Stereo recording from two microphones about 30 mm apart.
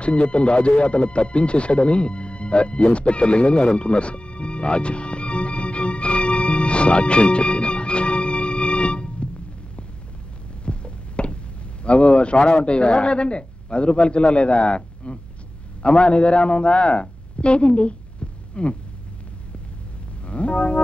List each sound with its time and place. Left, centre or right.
0.0 s music: left
10.6 s a sound: left
11.8 s speech: left
18.5 s heart sounds: left
20.2 s music: left